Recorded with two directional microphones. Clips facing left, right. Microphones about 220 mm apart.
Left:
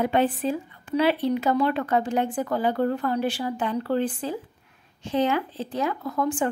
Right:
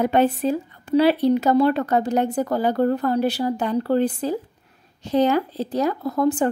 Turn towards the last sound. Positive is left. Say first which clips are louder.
# right 5 dB
turn(degrees=-40)  # may be behind; listen again after turning